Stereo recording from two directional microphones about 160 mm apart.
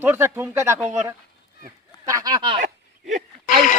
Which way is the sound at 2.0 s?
25° right (ahead or behind).